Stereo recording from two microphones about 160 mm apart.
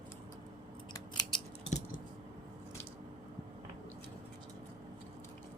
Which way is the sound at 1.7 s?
45° left (ahead or behind).